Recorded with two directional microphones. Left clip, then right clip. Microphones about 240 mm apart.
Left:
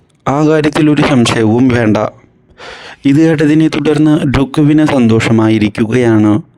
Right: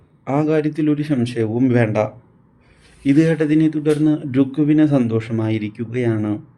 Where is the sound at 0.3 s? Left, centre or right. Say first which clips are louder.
Left 8 dB; left.